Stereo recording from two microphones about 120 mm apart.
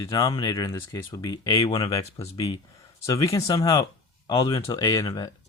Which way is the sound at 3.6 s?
30° left (ahead or behind).